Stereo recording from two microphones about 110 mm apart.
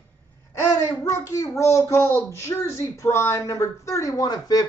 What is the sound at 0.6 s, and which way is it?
A child's voice, 30° left (ahead or behind).